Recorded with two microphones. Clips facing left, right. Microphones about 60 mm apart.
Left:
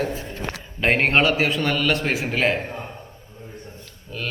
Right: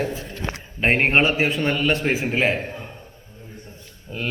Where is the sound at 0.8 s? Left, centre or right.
Right.